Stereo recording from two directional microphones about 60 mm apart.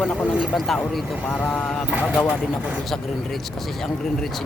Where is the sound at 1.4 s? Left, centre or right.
Centre.